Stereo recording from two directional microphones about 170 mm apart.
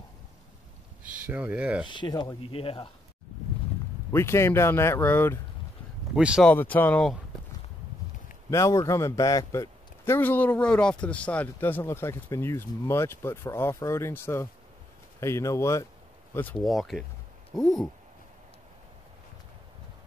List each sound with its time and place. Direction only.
1.1 s speech: 10° right (ahead or behind)
1.9 s speech: 25° left (ahead or behind)
4.1 s a man's voice: 15° left (ahead or behind)
6.1 s speech: 5° right (ahead or behind)
6.5 s a man's voice: 10° left (ahead or behind)
8.5 s a man's voice: 20° left (ahead or behind)
16.6 s speech: centre (ahead or behind)